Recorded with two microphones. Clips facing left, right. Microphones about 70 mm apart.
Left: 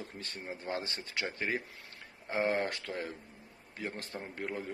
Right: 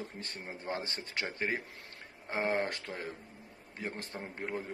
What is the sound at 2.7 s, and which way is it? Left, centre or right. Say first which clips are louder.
Speech: left 1 dB; right.